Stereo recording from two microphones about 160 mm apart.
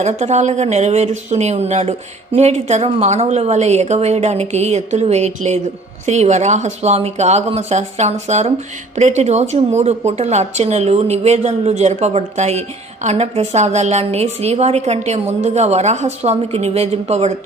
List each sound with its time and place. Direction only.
0.0 s speech: 45° right (ahead or behind)